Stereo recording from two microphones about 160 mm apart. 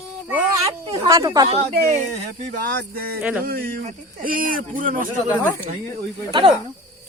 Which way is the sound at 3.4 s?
65° right (ahead or behind).